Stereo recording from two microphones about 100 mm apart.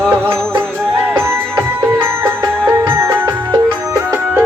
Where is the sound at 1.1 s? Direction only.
25° right (ahead or behind).